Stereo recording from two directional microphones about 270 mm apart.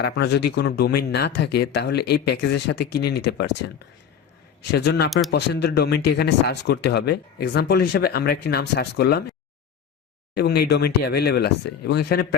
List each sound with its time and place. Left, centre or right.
0.0 s speech: left
4.7 s speech: left
10.3 s speech: left